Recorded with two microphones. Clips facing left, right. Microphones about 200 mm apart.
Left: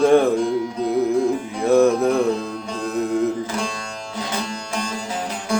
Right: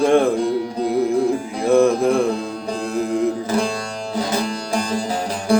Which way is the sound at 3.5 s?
35° right (ahead or behind).